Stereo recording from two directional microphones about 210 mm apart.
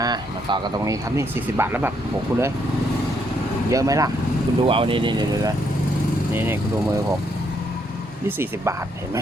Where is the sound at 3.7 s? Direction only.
15° right (ahead or behind).